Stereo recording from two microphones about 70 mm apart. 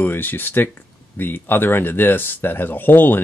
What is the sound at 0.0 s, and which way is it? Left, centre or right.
Speech, left.